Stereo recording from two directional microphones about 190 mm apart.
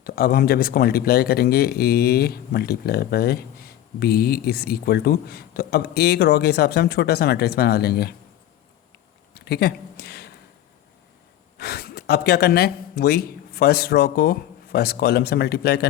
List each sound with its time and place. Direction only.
0.0 s speech: 55° left (ahead or behind)
9.3 s a sound: 55° left (ahead or behind)
11.5 s speech: 55° left (ahead or behind)